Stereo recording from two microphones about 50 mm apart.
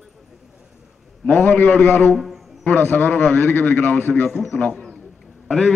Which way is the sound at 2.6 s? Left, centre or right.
Left.